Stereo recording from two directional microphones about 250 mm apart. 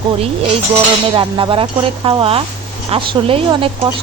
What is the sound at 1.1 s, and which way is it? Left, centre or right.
Speech, centre.